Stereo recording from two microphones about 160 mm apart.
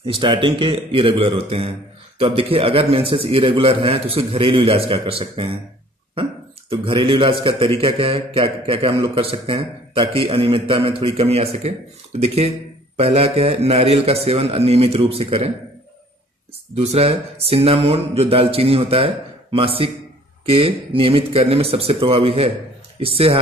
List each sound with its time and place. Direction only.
0.0 s a man's voice: 30° right (ahead or behind)
6.8 s a man's voice: 30° right (ahead or behind)
16.7 s a man's voice: 40° right (ahead or behind)